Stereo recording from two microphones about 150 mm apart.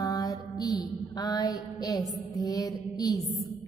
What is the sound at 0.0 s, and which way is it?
Mantra, 25° left (ahead or behind).